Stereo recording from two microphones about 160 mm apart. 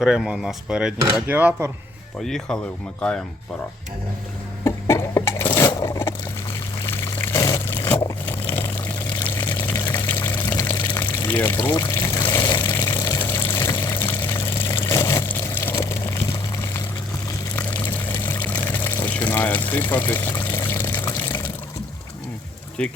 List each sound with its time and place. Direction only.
0.0 s speech: 5° right (ahead or behind)
2.2 s speech: centre (ahead or behind)
4.6 s a sound: 20° left (ahead or behind)
6.8 s water: 20° left (ahead or behind)
11.0 s pour: 10° left (ahead or behind)
14.6 s a sound: 15° left (ahead or behind)
17.6 s water: 10° left (ahead or behind)
22.8 s speech: 5° left (ahead or behind)